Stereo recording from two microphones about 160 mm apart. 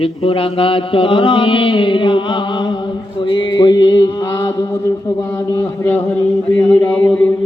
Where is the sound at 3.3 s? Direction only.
30° left (ahead or behind).